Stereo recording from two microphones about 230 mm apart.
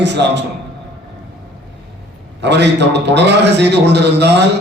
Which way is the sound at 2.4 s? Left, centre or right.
Right.